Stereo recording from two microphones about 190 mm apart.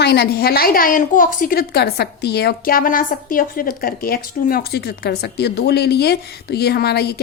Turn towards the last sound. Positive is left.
turn(degrees=55)  # may be behind; listen again after turning